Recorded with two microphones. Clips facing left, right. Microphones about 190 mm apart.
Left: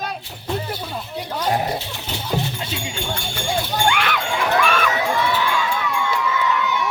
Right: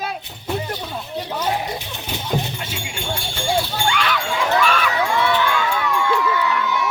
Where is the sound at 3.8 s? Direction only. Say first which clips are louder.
Left 1 dB; 55° left (ahead or behind).